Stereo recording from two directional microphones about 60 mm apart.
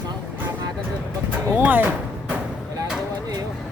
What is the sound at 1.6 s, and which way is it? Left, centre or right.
Speech, right.